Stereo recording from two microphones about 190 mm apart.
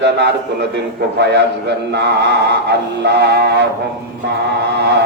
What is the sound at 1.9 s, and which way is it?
Speech, 60° right (ahead or behind).